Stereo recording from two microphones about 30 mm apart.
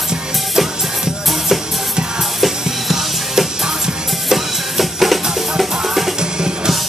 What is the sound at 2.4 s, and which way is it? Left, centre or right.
Music, centre.